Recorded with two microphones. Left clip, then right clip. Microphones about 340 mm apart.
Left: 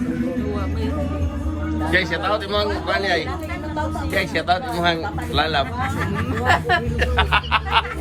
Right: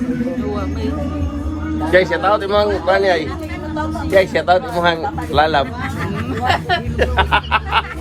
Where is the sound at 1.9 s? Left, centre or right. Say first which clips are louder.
Right 7 dB; centre.